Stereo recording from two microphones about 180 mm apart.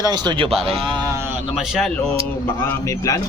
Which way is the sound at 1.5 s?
Centre (ahead or behind).